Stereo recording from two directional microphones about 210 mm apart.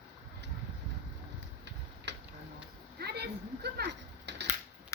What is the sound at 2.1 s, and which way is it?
Tick-tock, 55° right (ahead or behind).